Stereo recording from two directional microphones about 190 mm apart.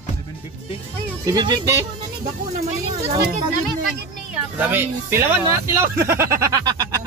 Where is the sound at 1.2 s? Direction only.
20° right (ahead or behind).